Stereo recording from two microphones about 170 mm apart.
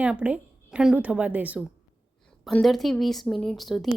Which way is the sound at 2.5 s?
Centre (ahead or behind).